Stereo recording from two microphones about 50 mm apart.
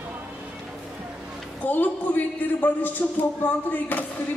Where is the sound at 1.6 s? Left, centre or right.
Left.